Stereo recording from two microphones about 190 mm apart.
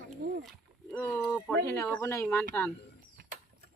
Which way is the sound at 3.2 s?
55° right (ahead or behind).